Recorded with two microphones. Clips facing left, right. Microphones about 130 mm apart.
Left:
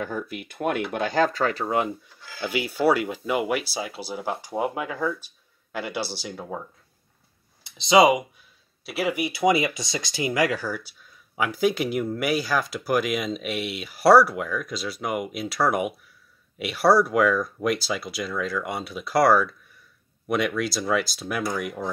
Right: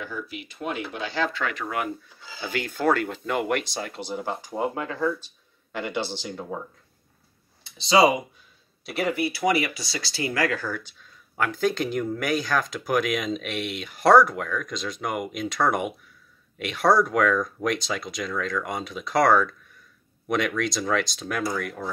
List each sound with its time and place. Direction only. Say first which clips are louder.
0.0 s speech: left 4 dB; 50° left (ahead or behind); by 2.0 s 25° left (ahead or behind)
2.1 s speech: even; 15° right (ahead or behind)
2.4 s speech: left 2 dB; 10° left (ahead or behind)
7.7 s speech: left 2 dB; 20° left (ahead or behind)
8.8 s speech: even; 5° left (ahead or behind)
9.1 s speech: left 3 dB; 15° left (ahead or behind)